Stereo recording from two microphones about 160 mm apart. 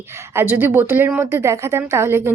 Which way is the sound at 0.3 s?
10° right (ahead or behind).